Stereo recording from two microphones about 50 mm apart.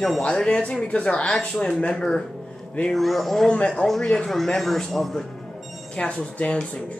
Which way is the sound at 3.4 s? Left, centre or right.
Left.